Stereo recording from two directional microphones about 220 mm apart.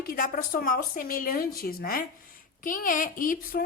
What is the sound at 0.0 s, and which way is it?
Speech, 40° left (ahead or behind).